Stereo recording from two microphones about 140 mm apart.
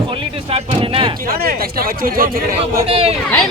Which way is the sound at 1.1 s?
90° right.